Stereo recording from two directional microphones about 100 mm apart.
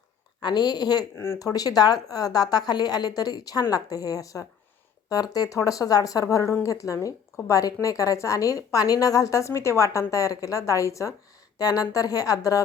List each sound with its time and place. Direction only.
0.4 s a woman's voice: 45° left (ahead or behind)
1.1 s speech: 25° left (ahead or behind)
1.4 s a woman's voice: 35° left (ahead or behind)